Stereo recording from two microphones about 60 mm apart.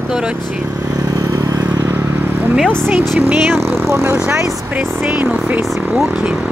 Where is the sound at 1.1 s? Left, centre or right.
Right.